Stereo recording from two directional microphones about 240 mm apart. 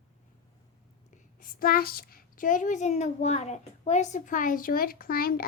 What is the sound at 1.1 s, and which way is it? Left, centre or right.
A woman's voice, left.